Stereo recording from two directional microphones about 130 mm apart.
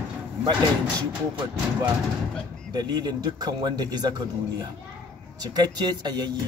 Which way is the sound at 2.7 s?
30° right (ahead or behind).